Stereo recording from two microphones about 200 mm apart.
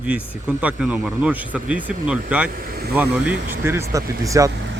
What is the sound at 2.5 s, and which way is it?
Speech, 50° right (ahead or behind).